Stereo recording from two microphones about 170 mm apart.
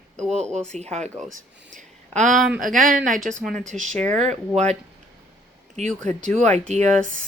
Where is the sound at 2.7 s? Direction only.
50° right (ahead or behind).